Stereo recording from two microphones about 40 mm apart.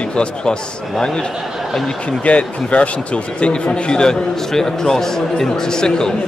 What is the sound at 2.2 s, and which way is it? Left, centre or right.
Speech, left.